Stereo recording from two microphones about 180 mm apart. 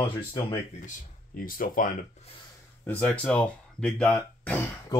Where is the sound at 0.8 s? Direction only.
50° left (ahead or behind).